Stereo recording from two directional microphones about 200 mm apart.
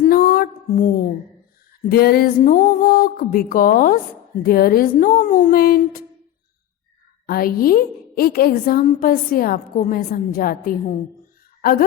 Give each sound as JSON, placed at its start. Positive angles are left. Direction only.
{"t": 0.1, "sound": "a sound", "side_deg": 45}
{"t": 1.8, "sound": "a woman's voice", "side_deg": 50}
{"t": 7.3, "sound": "a woman's voice", "side_deg": 50}